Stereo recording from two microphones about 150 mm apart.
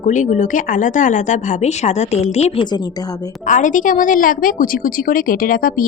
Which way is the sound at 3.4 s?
60° left (ahead or behind).